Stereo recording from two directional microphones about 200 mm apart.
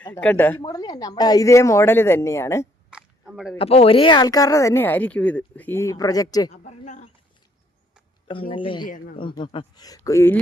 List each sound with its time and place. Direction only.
0.0 s speech: 10° left (ahead or behind)
0.6 s speech: 20° left (ahead or behind)
2.9 s chewing: 5° right (ahead or behind)
3.6 s speech: 30° left (ahead or behind)
6.5 s a sound: 35° left (ahead or behind)
8.3 s speech: 25° left (ahead or behind)